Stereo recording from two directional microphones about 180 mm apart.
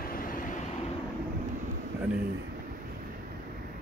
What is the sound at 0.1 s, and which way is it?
Vehicle, 50° left (ahead or behind).